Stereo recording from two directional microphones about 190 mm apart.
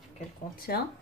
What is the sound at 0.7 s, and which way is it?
Speech, 55° left (ahead or behind).